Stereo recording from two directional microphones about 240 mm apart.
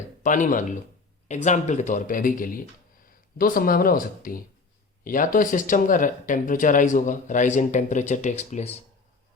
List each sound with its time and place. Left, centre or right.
0.2 s speech: left